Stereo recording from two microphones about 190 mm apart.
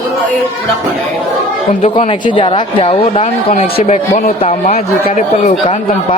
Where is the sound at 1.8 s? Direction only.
30° left (ahead or behind).